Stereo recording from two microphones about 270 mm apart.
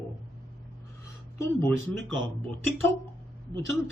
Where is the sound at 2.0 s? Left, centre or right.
Right.